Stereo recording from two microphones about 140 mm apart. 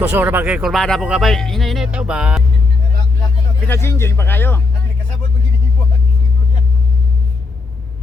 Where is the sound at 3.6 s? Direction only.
15° left (ahead or behind).